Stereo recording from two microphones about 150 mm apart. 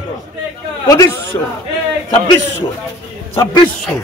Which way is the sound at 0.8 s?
25° left (ahead or behind).